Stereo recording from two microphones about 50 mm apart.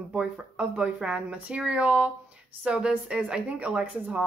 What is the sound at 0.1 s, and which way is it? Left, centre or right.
A woman's voice, centre.